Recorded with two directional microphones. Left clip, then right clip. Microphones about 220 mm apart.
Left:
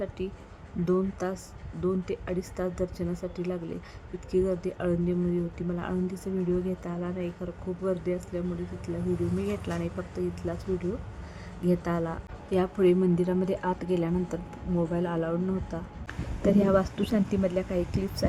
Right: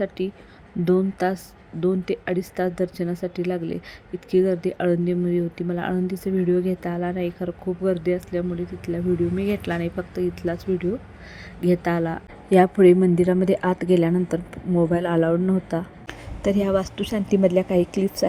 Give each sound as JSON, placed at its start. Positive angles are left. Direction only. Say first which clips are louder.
{"t": 0.9, "sound": "a woman's voice", "louder": "right 7 dB", "side_deg": -15}